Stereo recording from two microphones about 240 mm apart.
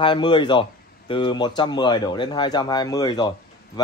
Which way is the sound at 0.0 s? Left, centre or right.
Centre.